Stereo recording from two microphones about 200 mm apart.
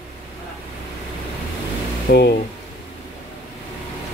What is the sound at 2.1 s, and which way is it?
Speech, 50° left (ahead or behind).